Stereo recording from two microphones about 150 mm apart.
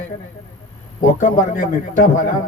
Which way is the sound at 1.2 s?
60° left (ahead or behind).